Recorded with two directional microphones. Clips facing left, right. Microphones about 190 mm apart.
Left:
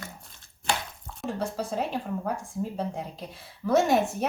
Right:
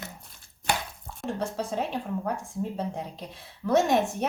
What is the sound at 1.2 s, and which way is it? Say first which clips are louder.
A woman's voice: even; centre (ahead or behind).